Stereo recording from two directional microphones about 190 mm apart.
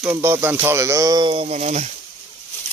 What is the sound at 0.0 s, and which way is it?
Speech, 10° right (ahead or behind).